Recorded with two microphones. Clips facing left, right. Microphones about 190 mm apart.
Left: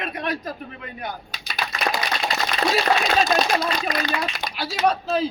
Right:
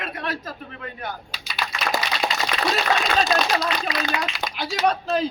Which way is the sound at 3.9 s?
50° left (ahead or behind).